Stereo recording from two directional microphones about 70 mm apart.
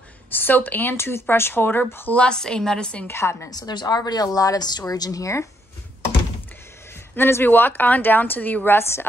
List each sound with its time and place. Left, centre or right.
0.3 s speech: left
2.1 s a woman's voice: centre
3.1 s speech: left
3.4 s speech: left
7.2 s a woman's voice: left